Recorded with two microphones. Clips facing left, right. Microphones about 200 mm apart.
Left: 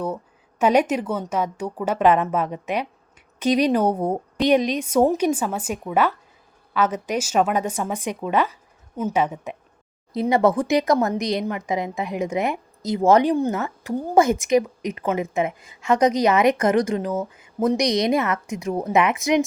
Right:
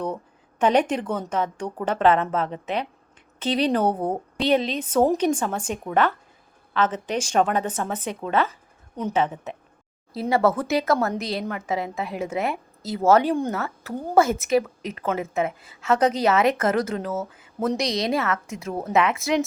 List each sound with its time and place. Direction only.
0.6 s speech: 10° left (ahead or behind)